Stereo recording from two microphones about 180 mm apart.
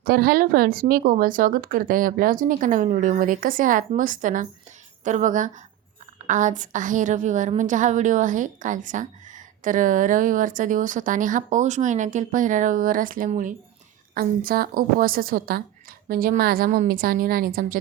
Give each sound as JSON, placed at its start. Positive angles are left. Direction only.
{"t": 0.0, "sound": "speech", "side_deg": -55}